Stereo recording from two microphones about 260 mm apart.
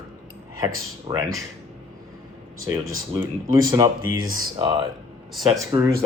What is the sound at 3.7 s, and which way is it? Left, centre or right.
Speech, centre.